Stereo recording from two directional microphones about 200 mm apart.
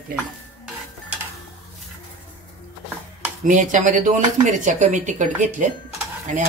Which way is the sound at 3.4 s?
40° right (ahead or behind).